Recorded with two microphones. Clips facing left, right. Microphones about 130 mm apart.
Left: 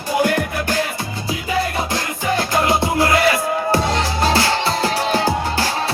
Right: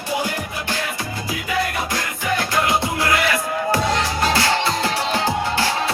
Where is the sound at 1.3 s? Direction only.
30° left (ahead or behind).